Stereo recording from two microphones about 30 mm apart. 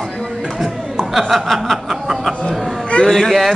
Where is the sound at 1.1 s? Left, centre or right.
Centre.